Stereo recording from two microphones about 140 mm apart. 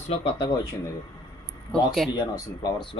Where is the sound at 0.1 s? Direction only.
30° left (ahead or behind).